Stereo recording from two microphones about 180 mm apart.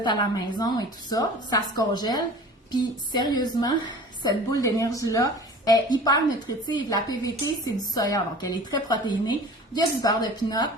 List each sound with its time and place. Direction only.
0.0 s a woman's voice: 25° left (ahead or behind)